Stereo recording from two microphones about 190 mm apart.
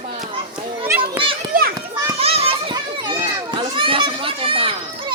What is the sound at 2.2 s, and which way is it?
Children playing, 30° right (ahead or behind).